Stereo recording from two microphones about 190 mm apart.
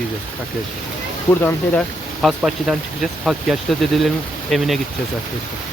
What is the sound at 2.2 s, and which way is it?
Speech, centre (ahead or behind).